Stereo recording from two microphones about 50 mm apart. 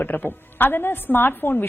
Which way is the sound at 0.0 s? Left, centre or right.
Left.